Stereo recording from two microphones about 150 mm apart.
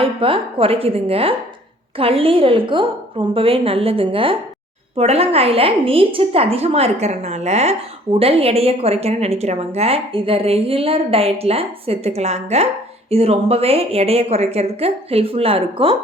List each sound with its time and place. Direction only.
0.0 s a woman's voice: 35° right (ahead or behind)